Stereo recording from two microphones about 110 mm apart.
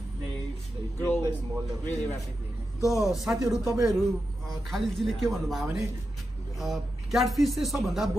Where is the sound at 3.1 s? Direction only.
5° right (ahead or behind).